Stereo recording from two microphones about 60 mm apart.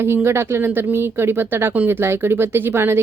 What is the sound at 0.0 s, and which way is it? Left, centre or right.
Speech, right.